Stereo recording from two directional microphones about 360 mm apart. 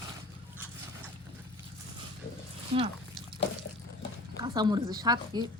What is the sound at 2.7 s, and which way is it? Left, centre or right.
Speech, centre.